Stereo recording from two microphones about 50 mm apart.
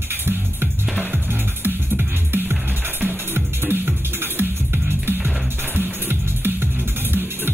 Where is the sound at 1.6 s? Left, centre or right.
Right.